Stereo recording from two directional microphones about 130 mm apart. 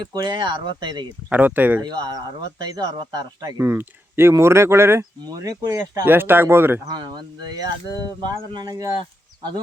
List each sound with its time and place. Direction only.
0.1 s speech: 35° right (ahead or behind)
1.3 s speech: 15° right (ahead or behind)
1.8 s speech: 30° right (ahead or behind)
3.6 s speech: 15° right (ahead or behind)
6.8 s speech: 30° right (ahead or behind)